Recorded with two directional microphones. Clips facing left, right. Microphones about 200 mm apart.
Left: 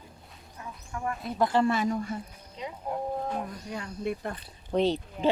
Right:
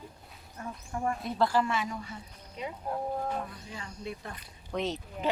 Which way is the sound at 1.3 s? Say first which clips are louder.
Left 2 dB; 20° left (ahead or behind).